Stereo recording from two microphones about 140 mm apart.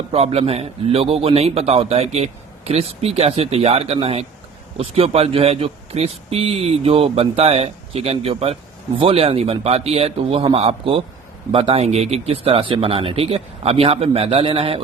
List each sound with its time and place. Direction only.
0.1 s a man's voice: 45° right (ahead or behind)